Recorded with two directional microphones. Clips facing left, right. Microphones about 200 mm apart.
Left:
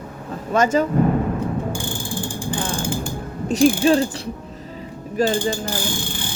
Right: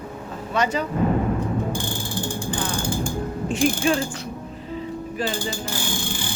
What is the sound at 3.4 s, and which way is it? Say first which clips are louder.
Mechanisms: left 6 dB; 35° left (ahead or behind).